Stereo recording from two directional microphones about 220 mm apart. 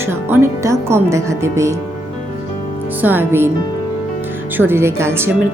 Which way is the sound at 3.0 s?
10° right (ahead or behind).